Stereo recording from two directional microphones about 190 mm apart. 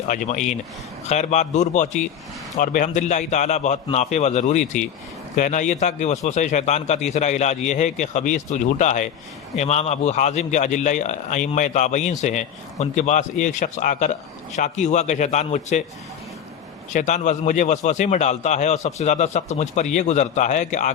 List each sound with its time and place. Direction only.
0.1 s a man's voice: 40° left (ahead or behind)
16.9 s a man's voice: 40° left (ahead or behind)